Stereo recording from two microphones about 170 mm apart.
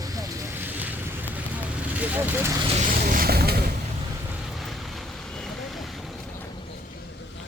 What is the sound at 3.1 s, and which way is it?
Vehicle, 60° right (ahead or behind).